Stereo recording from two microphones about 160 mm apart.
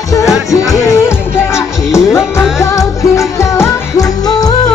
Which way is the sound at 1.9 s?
15° left (ahead or behind).